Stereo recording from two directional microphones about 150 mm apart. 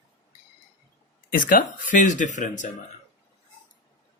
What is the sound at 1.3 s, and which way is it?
Speech, 70° left (ahead or behind).